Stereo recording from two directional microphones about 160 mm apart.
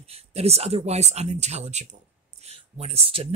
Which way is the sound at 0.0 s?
40° right (ahead or behind).